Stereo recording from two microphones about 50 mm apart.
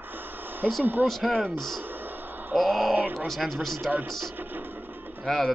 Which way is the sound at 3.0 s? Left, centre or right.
Right.